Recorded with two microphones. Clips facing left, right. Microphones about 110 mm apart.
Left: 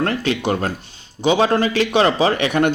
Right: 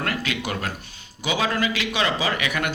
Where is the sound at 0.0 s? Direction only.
30° left (ahead or behind).